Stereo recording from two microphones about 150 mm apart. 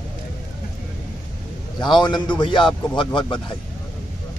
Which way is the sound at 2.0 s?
30° left (ahead or behind).